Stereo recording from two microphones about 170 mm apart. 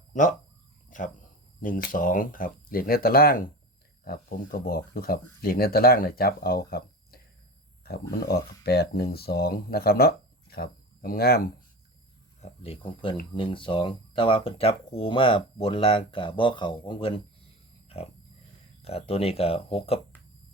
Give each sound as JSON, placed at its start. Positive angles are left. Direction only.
{"t": 0.1, "sound": "speech", "side_deg": 50}
{"t": 0.9, "sound": "a sound", "side_deg": 50}
{"t": 1.6, "sound": "speech", "side_deg": 55}
{"t": 8.6, "sound": "speech", "side_deg": 70}
{"t": 12.4, "sound": "speech", "side_deg": 35}
{"t": 17.8, "sound": "a sound", "side_deg": 35}
{"t": 18.8, "sound": "speech", "side_deg": 35}